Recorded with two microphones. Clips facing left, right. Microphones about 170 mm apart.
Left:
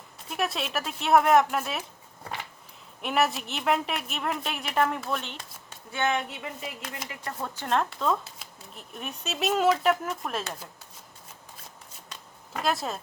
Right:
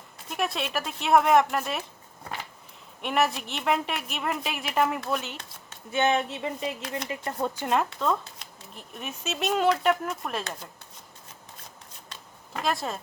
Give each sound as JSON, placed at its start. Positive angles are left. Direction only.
{"t": 0.3, "sound": "speech", "side_deg": 0}
{"t": 3.0, "sound": "speech", "side_deg": 0}
{"t": 5.9, "sound": "a sound", "side_deg": -25}
{"t": 7.1, "sound": "speech", "side_deg": -20}
{"t": 12.6, "sound": "speech", "side_deg": 0}